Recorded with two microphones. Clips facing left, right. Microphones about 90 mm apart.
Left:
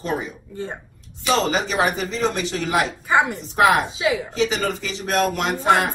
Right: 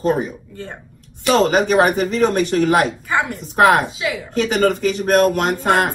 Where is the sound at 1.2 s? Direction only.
55° right (ahead or behind).